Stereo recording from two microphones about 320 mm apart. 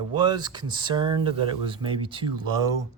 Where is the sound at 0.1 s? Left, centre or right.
Centre.